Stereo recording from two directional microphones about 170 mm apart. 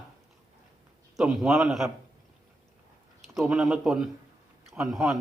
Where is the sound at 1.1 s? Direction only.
Centre (ahead or behind).